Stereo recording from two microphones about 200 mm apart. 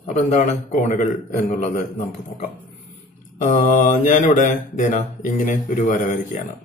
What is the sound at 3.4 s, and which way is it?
Mantra, 40° left (ahead or behind).